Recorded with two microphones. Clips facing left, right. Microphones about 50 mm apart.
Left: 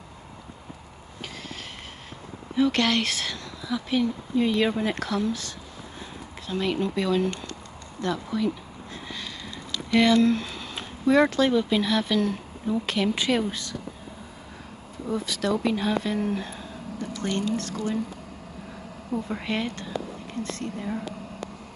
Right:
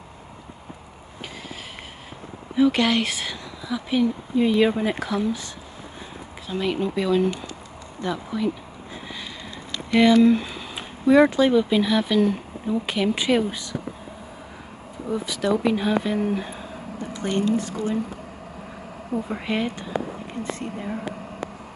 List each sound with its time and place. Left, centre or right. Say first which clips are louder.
2.5 s speech: right 3 dB; centre
8.9 s a sound: right 1 dB; centre
9.7 s a sound: even; right
9.9 s speech: right 4 dB; centre
15.0 s speech: right 3 dB; centre
19.2 s speech: right 4 dB; centre